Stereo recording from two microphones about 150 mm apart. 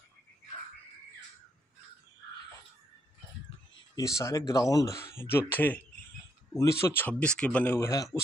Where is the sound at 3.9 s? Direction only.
20° left (ahead or behind).